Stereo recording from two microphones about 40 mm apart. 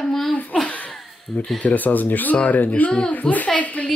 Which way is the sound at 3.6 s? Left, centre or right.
Left.